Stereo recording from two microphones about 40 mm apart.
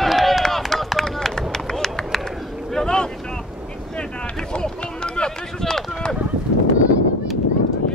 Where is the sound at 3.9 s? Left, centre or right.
Left.